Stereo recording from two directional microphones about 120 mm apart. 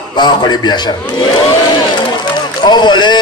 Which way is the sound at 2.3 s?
40° left (ahead or behind).